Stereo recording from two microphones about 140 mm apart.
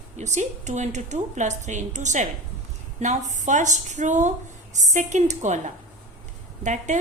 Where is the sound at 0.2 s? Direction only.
55° right (ahead or behind).